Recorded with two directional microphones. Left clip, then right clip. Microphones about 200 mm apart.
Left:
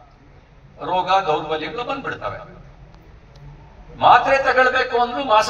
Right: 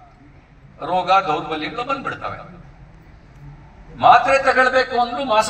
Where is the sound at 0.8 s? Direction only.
50° left (ahead or behind).